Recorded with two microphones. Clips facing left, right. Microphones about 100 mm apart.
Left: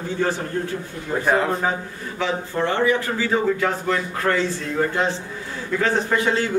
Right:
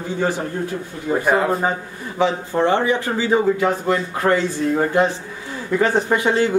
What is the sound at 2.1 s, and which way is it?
A man's voice, 20° right (ahead or behind).